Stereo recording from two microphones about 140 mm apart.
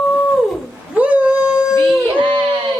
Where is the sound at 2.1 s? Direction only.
35° right (ahead or behind).